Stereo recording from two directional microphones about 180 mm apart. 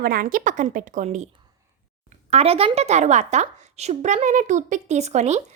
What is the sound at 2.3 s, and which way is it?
A woman's voice, 35° right (ahead or behind).